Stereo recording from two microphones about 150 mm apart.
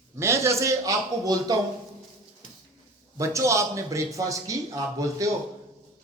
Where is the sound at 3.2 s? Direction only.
20° right (ahead or behind).